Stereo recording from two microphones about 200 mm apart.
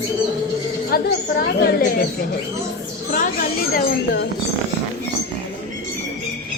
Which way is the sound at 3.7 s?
55° left (ahead or behind).